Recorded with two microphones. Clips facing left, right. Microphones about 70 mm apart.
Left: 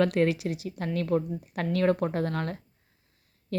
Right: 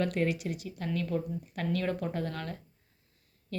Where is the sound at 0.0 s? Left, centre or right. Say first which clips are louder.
Left 6 dB; left.